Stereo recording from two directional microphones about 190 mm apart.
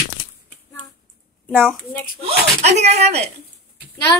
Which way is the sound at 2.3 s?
35° right (ahead or behind).